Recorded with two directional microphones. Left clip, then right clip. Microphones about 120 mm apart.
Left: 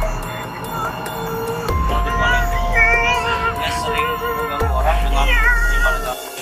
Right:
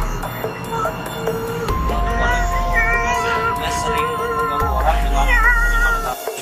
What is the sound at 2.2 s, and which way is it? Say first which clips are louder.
Music: left 1 dB; 5° left (ahead or behind).